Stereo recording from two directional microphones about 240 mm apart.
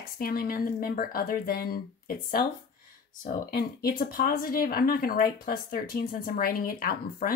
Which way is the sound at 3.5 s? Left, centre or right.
Left.